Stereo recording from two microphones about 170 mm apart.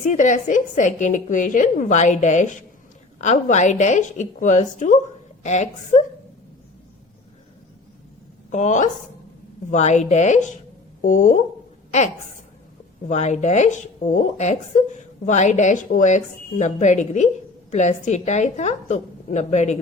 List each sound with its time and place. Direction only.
0.0 s a woman's voice: 45° left (ahead or behind)
8.4 s a woman's voice: 45° left (ahead or behind)